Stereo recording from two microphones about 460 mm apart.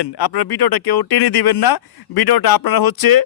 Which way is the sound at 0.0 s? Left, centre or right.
Left.